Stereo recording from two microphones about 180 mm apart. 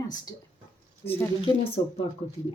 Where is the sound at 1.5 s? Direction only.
25° left (ahead or behind).